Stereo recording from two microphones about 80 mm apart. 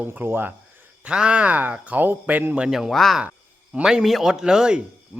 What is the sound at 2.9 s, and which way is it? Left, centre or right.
Speech, centre.